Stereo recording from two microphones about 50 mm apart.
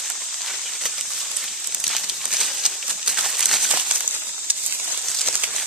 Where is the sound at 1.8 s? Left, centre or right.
Centre.